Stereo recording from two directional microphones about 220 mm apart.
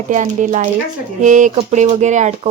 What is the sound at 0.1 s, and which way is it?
Speech, 35° right (ahead or behind).